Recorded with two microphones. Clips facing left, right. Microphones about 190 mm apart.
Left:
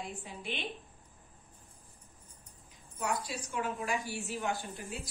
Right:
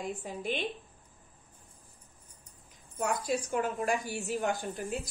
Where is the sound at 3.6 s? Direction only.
45° right (ahead or behind).